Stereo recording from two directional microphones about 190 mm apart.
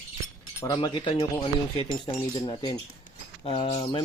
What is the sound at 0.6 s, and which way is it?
Speech, 25° left (ahead or behind).